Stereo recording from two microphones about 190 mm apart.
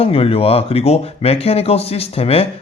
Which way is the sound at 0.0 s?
30° left (ahead or behind).